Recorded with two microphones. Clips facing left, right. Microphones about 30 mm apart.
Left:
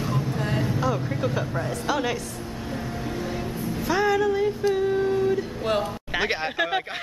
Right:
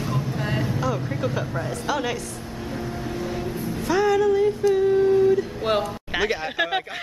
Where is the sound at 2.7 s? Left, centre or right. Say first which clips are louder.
Right 1 dB; centre.